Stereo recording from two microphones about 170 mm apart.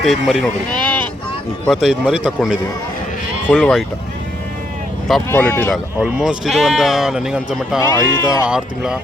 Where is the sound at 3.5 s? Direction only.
Centre (ahead or behind).